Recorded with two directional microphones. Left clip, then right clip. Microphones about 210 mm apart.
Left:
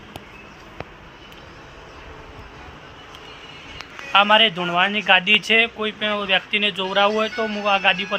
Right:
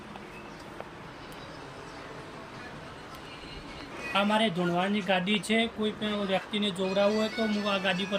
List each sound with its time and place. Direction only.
4.1 s speech: centre (ahead or behind)
6.3 s speech: 75° left (ahead or behind)
6.7 s speech: 30° left (ahead or behind)
7.7 s speech: 5° right (ahead or behind)